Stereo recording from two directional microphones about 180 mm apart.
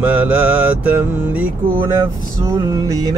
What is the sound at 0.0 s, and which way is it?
Mantra, 10° right (ahead or behind).